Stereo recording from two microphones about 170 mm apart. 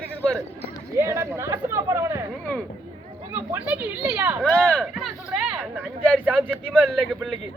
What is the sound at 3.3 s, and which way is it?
Speech, 10° right (ahead or behind).